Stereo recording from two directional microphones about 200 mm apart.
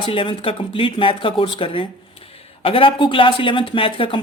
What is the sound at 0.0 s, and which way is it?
Speech, 25° left (ahead or behind).